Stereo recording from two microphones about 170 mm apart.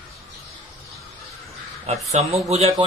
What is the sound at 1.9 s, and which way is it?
Speech, 40° right (ahead or behind).